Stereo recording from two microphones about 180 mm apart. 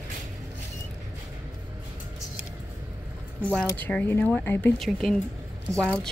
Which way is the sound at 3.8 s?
10° left (ahead or behind).